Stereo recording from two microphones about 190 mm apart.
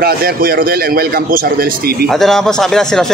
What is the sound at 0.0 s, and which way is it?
A man's voice, 50° right (ahead or behind).